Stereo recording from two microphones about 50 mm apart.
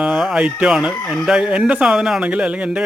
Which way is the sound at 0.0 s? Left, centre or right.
Centre.